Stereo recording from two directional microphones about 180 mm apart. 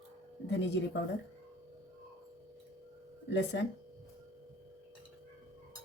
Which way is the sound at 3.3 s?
75° left (ahead or behind).